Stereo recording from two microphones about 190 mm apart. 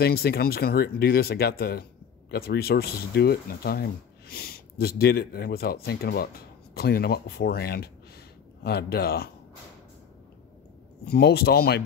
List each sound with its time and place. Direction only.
0.0 s speech: 55° left (ahead or behind)
11.1 s speech: 55° left (ahead or behind)